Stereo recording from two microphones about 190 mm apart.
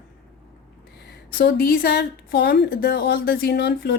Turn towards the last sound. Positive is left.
turn(degrees=60)  # may be behind; listen again after turning